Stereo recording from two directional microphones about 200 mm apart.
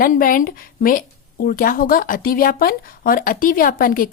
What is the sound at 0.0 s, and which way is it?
A woman's voice, 45° left (ahead or behind).